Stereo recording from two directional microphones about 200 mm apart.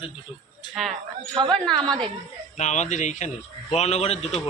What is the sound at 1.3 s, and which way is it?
Speech, 25° right (ahead or behind).